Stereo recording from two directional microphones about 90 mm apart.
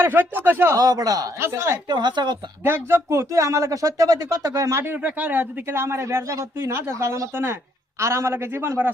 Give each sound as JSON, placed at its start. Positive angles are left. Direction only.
{"t": 0.0, "sound": "a man's voice", "side_deg": -25}
{"t": 0.8, "sound": "a man's voice", "side_deg": -45}
{"t": 1.4, "sound": "a man's voice", "side_deg": -30}
{"t": 1.9, "sound": "speech", "side_deg": -55}
{"t": 2.6, "sound": "a man's voice", "side_deg": -25}